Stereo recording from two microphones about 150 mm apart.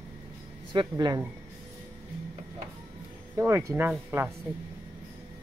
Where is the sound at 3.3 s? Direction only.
15° right (ahead or behind).